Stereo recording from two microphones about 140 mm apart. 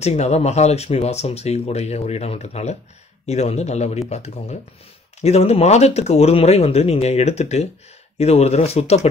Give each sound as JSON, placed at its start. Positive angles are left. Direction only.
{"t": 0.0, "sound": "speech", "side_deg": 50}